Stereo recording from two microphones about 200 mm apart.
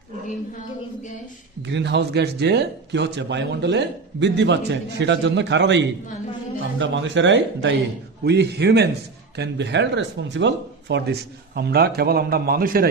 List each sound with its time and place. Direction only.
1.6 s speech: 60° right (ahead or behind)